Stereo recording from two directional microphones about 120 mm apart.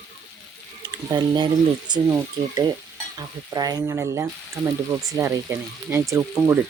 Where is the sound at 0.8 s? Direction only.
35° right (ahead or behind).